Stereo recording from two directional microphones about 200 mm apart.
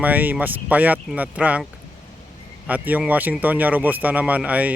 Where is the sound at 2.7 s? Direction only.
10° right (ahead or behind).